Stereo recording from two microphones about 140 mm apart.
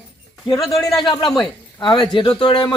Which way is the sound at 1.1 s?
30° left (ahead or behind).